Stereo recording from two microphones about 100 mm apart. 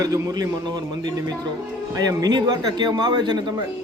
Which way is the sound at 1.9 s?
40° right (ahead or behind).